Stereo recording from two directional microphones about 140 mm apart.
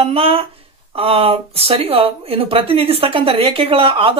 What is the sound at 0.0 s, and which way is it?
Speech, 45° right (ahead or behind).